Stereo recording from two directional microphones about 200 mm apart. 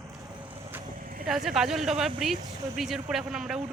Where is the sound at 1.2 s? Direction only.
Centre (ahead or behind).